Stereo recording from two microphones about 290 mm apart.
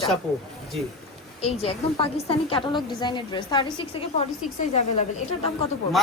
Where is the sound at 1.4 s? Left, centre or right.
Centre.